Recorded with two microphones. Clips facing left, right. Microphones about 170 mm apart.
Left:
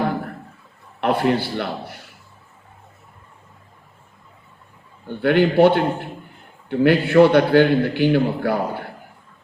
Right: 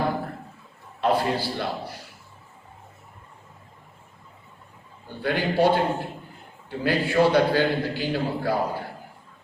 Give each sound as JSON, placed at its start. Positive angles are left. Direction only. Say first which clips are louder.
{"t": 1.0, "sound": "a man's voice", "louder": "left 4 dB", "side_deg": 60}
{"t": 5.0, "sound": "a man's voice", "louder": "left 9 dB", "side_deg": 65}